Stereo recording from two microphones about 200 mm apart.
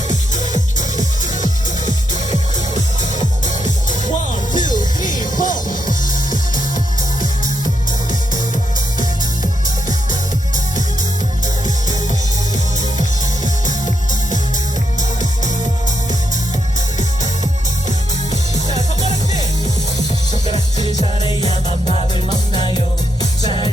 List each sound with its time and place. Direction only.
0.1 s music: 40° left (ahead or behind)
3.4 s music: 40° left (ahead or behind)
20.9 s music: 20° left (ahead or behind)